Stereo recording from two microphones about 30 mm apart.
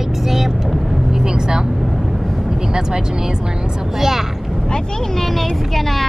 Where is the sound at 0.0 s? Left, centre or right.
Centre.